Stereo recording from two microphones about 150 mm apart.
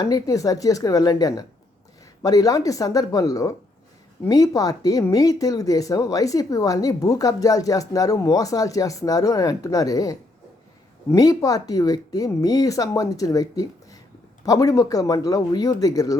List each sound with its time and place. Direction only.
0.0 s speech: 25° left (ahead or behind)